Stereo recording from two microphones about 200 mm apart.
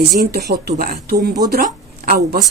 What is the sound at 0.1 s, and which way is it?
Speech, 50° right (ahead or behind).